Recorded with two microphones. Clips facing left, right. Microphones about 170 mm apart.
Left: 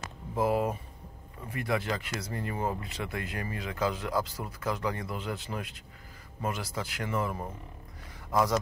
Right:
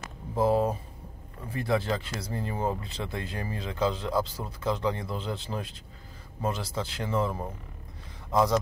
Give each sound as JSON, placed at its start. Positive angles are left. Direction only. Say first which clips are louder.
{"t": 0.4, "sound": "speech", "louder": "right 3 dB", "side_deg": -30}